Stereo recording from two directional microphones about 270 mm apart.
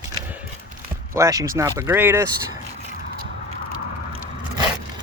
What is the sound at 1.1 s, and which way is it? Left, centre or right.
Speech, centre.